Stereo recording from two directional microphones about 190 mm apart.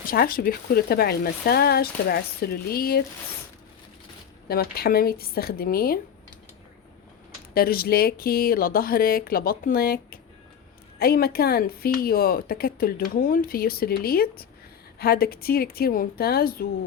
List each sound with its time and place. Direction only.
0.1 s a woman's voice: 50° left (ahead or behind)
4.4 s a woman's voice: 55° left (ahead or behind)
7.5 s a woman's voice: 50° left (ahead or behind)